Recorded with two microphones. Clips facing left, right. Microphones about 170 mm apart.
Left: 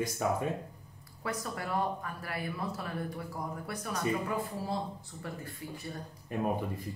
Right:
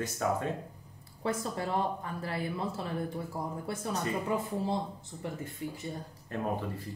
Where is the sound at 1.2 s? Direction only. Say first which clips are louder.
Right 4 dB; 25° right (ahead or behind).